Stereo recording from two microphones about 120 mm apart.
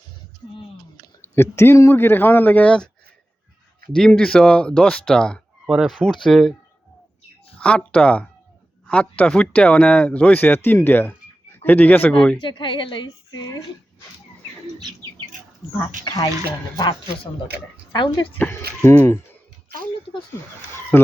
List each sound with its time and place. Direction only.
1.2 s speech: 20° left (ahead or behind)
3.9 s speech: 5° left (ahead or behind)
5.6 s speech: 5° right (ahead or behind)
7.6 s speech: 10° left (ahead or behind)
12.4 s a woman's voice: 45° left (ahead or behind)
15.6 s speech: 15° right (ahead or behind)
16.0 s a woman's voice: 30° left (ahead or behind)
18.3 s speech: 15° left (ahead or behind)
20.9 s speech: 15° left (ahead or behind)